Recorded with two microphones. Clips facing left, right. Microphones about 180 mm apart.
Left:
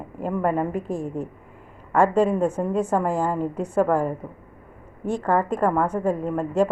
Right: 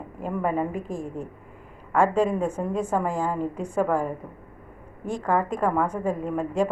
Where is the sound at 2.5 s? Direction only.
5° left (ahead or behind).